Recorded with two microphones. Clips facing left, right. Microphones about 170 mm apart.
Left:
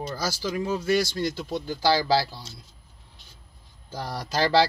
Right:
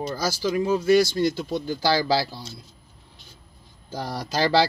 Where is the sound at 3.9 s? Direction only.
20° right (ahead or behind).